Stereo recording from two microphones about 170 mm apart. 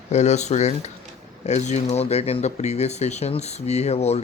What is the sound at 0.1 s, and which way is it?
Speech, 40° left (ahead or behind).